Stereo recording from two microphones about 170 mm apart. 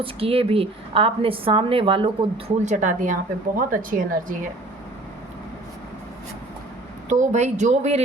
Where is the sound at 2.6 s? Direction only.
45° right (ahead or behind).